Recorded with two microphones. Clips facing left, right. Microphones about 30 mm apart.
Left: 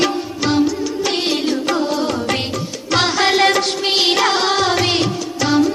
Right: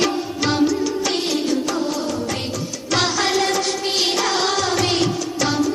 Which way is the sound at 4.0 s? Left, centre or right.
Left.